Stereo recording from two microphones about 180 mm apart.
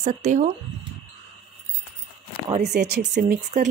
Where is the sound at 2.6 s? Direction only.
65° right (ahead or behind).